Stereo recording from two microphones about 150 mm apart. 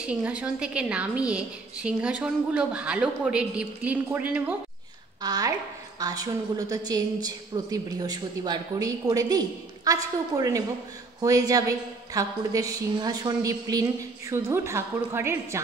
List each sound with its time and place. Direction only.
0.0 s a woman's voice: 10° right (ahead or behind)
5.2 s a woman's voice: 25° right (ahead or behind)